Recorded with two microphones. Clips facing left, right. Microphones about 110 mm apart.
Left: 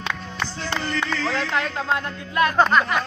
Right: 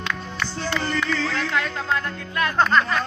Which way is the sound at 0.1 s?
25° left (ahead or behind).